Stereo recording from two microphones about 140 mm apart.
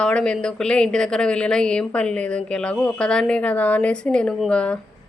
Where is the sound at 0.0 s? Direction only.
5° left (ahead or behind).